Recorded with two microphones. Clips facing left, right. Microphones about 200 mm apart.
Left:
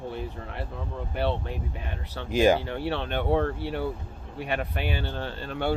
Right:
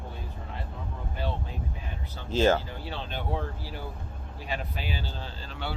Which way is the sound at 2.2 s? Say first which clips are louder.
Left 2 dB; 15° left (ahead or behind).